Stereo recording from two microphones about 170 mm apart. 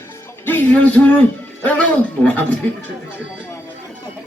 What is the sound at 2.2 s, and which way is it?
Speech, 10° left (ahead or behind).